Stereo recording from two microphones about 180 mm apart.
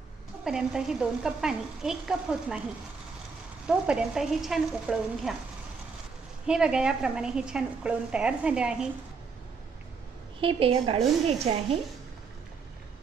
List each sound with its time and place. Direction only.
0.5 s a woman's voice: 5° right (ahead or behind)
3.6 s a woman's voice: 5° right (ahead or behind)
6.4 s a woman's voice: 5° right (ahead or behind)
10.4 s a woman's voice: 30° right (ahead or behind)